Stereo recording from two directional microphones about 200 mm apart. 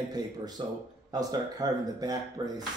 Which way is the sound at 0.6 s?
25° right (ahead or behind).